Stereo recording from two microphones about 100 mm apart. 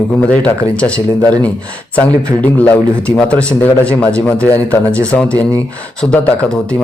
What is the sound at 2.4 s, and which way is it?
Speech, 15° left (ahead or behind).